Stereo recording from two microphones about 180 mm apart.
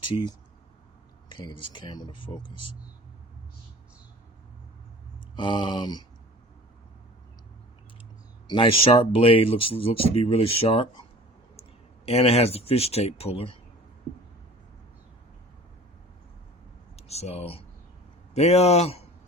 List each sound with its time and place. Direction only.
1.3 s speech: 25° left (ahead or behind)
5.4 s speech: 25° left (ahead or behind)
8.4 s speech: 30° left (ahead or behind)
12.0 s speech: 35° left (ahead or behind)
17.0 s speech: 35° left (ahead or behind)